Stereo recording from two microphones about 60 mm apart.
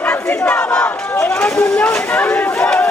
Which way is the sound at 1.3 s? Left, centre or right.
Left.